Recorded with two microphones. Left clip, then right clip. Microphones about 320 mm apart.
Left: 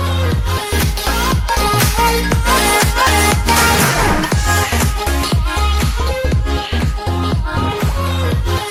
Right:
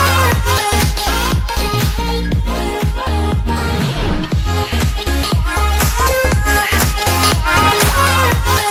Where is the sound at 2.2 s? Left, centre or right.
Left.